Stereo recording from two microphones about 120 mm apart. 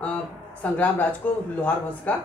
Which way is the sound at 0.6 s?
15° left (ahead or behind).